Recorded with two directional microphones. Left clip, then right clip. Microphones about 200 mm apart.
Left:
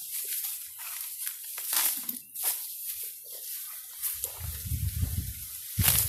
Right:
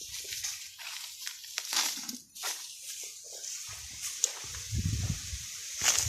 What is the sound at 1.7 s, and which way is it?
Crushing, 15° right (ahead or behind).